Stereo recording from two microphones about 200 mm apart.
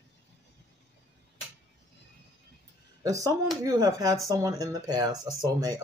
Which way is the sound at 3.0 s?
15° right (ahead or behind).